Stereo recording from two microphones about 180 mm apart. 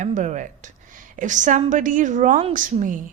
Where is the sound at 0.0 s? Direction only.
45° right (ahead or behind).